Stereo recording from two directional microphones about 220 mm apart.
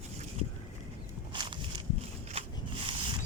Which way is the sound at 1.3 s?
20° right (ahead or behind).